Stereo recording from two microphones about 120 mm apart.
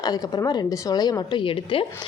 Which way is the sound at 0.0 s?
35° left (ahead or behind).